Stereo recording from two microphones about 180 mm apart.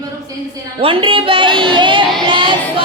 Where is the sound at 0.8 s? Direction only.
30° right (ahead or behind).